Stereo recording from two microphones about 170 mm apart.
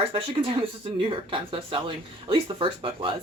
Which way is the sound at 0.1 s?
30° right (ahead or behind).